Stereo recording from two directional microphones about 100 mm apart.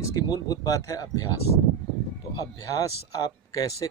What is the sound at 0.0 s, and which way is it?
Speech, 40° left (ahead or behind).